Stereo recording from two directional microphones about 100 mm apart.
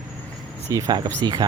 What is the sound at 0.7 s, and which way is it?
Speech, 45° right (ahead or behind).